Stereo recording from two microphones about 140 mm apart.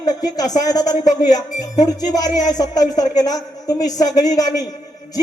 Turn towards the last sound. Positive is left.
turn(degrees=25)  # may be behind; listen again after turning